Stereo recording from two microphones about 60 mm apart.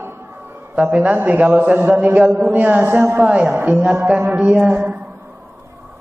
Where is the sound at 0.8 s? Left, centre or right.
Right.